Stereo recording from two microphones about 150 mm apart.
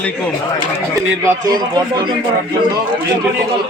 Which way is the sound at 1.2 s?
25° right (ahead or behind).